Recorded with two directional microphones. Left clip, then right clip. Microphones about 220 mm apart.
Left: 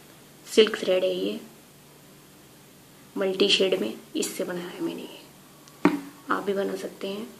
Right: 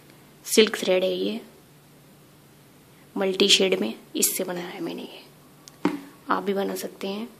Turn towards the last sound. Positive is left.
turn(degrees=-40)  # may be behind; listen again after turning